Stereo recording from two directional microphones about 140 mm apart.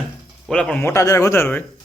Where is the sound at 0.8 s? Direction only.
20° left (ahead or behind).